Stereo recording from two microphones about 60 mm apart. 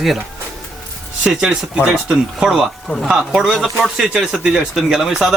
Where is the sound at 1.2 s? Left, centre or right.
Centre.